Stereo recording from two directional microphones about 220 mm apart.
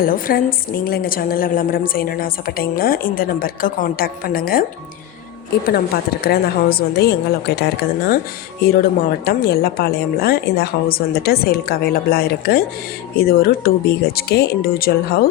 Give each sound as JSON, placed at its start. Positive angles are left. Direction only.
{"t": 0.0, "sound": "a woman's voice", "side_deg": 40}
{"t": 5.6, "sound": "a woman's voice", "side_deg": 45}
{"t": 9.2, "sound": "a woman's voice", "side_deg": 45}